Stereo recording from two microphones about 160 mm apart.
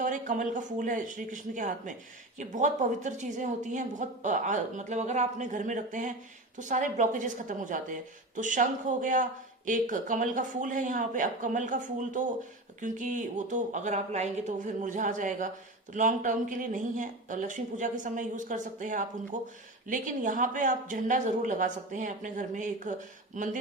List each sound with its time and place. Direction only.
0.0 s speech: 50° right (ahead or behind)